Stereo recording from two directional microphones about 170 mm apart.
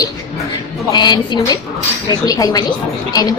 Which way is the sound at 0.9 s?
25° left (ahead or behind).